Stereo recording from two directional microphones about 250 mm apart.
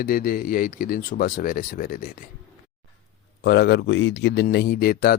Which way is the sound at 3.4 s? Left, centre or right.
Left.